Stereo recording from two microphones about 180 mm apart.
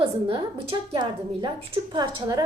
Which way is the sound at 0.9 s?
25° right (ahead or behind).